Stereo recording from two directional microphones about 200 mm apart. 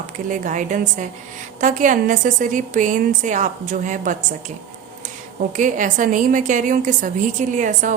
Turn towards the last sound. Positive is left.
turn(degrees=-40)  # may be behind; listen again after turning